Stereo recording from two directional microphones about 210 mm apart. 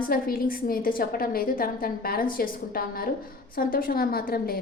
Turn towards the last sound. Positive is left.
turn(degrees=45)  # may be behind; listen again after turning